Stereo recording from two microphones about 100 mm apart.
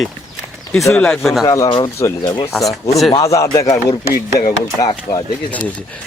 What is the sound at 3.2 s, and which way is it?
Speech, 30° left (ahead or behind).